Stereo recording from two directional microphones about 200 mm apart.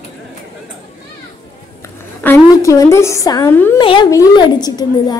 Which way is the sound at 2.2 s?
10° left (ahead or behind).